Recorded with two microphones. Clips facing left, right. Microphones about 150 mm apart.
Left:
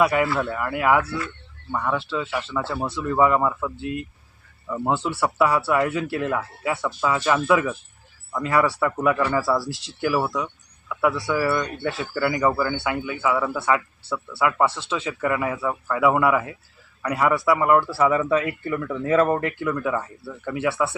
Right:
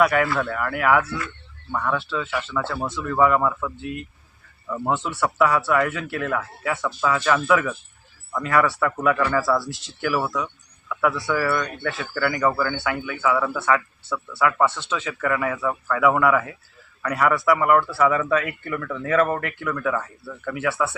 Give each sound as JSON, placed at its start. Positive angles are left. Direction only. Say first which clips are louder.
{"t": 0.0, "sound": "speech", "louder": "even", "side_deg": 25}
{"t": 0.3, "sound": "speech", "louder": "even", "side_deg": 5}
{"t": 0.5, "sound": "speech", "louder": "right 1 dB", "side_deg": 20}
{"t": 2.6, "sound": "speech", "louder": "left 1 dB", "side_deg": 0}
{"t": 3.1, "sound": "speech", "louder": "even", "side_deg": 20}
{"t": 5.0, "sound": "speech", "louder": "right 1 dB", "side_deg": 30}
{"t": 9.4, "sound": "speech", "louder": "right 1 dB", "side_deg": 5}
{"t": 10.2, "sound": "speech", "louder": "left 1 dB", "side_deg": 20}
{"t": 11.6, "sound": "speech", "louder": "left 1 dB", "side_deg": 30}
{"t": 12.1, "sound": "speech", "louder": "even", "side_deg": 15}
{"t": 14.1, "sound": "speech", "louder": "right 1 dB", "side_deg": 25}
{"t": 15.5, "sound": "speech", "louder": "right 1 dB", "side_deg": 5}
{"t": 15.9, "sound": "speech", "louder": "even", "side_deg": 20}
{"t": 19.6, "sound": "speech", "louder": "left 1 dB", "side_deg": 15}